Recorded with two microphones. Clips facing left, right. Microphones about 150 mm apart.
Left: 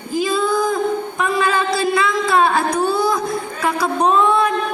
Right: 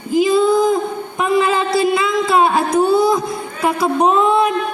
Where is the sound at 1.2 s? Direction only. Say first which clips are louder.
Right 4 dB; 20° right (ahead or behind).